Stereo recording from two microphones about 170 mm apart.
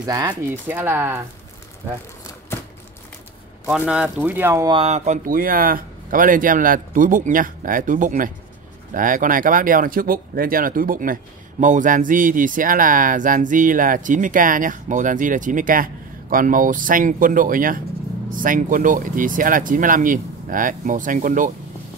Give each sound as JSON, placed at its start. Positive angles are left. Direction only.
{"t": 0.0, "sound": "speech", "side_deg": -25}
{"t": 0.7, "sound": "speech", "side_deg": -10}
{"t": 2.5, "sound": "a sound", "side_deg": 15}
{"t": 3.6, "sound": "speech", "side_deg": -5}
{"t": 4.6, "sound": "speech", "side_deg": -35}